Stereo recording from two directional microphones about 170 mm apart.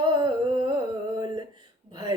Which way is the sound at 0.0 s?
25° right (ahead or behind).